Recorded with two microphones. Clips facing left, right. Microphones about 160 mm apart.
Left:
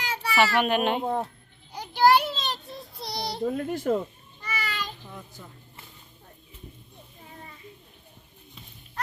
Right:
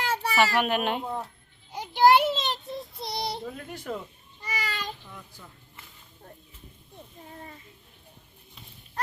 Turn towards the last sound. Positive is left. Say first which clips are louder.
# right 2 dB
turn(degrees=-45)  # may be behind; listen again after turning